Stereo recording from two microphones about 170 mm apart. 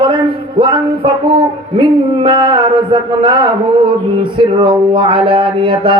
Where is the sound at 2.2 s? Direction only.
30° right (ahead or behind).